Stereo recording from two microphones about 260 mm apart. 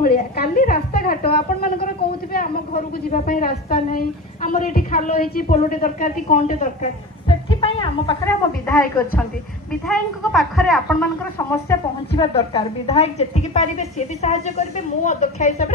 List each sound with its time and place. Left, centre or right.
0.0 s a woman's voice: left; by 8.2 s centre
8.6 s a woman's voice: centre
12.2 s a woman's voice: left